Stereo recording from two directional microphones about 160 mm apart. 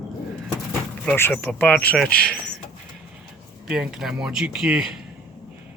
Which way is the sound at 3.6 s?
5° right (ahead or behind).